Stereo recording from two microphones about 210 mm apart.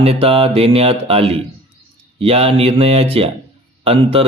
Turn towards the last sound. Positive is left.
turn(degrees=-25)  # may be behind; listen again after turning